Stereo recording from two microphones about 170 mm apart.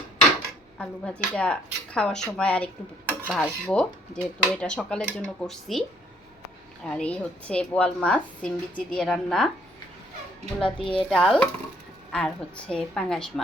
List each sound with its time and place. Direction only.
0.8 s dishes: 5° left (ahead or behind)
6.8 s a woman's voice: 5° left (ahead or behind)
9.0 s dishes: 5° left (ahead or behind)
10.6 s a child's voice: 30° left (ahead or behind)
11.1 s dishes: 5° left (ahead or behind)